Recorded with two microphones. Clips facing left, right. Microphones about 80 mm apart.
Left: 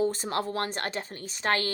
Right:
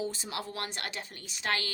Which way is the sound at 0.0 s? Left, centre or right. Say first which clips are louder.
Left 8 dB; left.